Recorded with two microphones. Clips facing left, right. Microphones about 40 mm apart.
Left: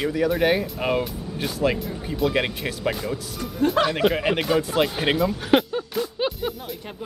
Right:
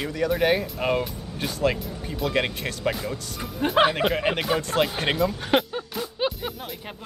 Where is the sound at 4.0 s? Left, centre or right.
Centre.